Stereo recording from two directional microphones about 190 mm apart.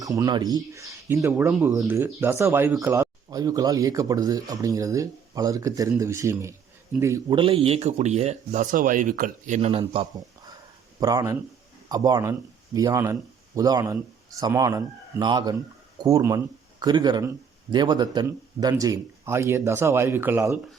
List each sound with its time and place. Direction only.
0.0 s speech: 20° right (ahead or behind)
7.3 s speech: 30° right (ahead or behind)
11.0 s speech: 20° right (ahead or behind)